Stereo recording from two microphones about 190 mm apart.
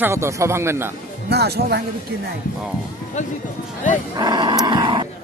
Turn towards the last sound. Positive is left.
turn(degrees=-25)  # may be behind; listen again after turning